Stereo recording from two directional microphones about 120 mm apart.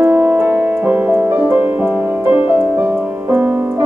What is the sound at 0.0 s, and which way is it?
Music, 15° right (ahead or behind).